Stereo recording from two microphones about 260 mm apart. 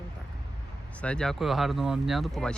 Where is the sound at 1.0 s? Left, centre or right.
Centre.